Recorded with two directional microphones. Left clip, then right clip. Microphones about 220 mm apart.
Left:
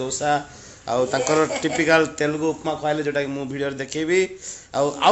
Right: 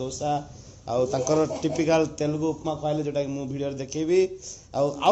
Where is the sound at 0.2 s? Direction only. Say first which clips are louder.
Left 6 dB; 90° left.